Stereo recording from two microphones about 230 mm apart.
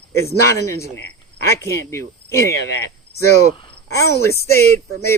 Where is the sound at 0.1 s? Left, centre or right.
Centre.